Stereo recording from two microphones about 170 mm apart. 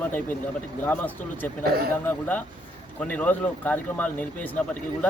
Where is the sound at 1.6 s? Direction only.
65° right (ahead or behind).